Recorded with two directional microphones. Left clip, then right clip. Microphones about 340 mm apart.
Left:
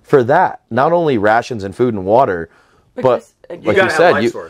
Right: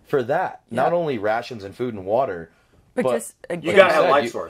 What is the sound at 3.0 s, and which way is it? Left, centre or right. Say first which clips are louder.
Speech: left 7 dB; right.